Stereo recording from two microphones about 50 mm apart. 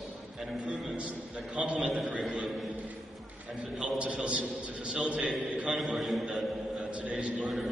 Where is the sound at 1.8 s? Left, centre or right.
Centre.